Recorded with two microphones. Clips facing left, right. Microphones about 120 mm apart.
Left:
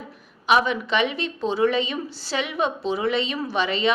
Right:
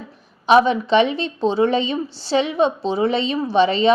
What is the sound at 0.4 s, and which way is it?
A woman's voice, 30° right (ahead or behind).